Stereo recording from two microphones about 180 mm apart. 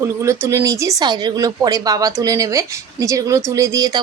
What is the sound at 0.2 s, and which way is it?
Speech, 15° right (ahead or behind).